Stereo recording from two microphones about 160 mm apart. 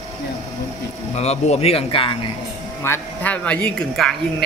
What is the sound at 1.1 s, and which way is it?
Speech, 40° left (ahead or behind).